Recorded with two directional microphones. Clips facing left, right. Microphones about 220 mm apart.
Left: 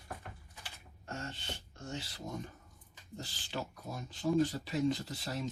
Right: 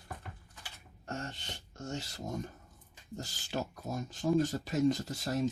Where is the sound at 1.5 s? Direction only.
45° right (ahead or behind).